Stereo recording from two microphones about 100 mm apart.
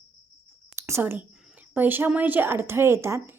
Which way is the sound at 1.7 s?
20° right (ahead or behind).